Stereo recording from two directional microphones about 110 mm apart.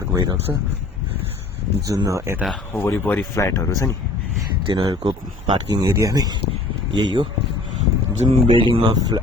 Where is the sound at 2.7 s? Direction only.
20° left (ahead or behind).